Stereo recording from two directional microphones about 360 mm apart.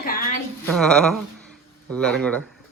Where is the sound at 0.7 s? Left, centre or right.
Centre.